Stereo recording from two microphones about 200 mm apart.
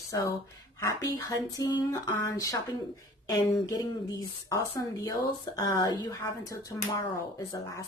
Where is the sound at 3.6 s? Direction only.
15° left (ahead or behind).